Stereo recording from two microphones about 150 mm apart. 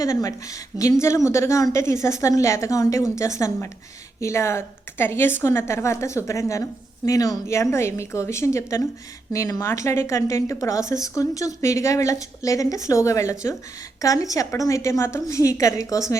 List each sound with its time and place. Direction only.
0.0 s speech: 20° left (ahead or behind)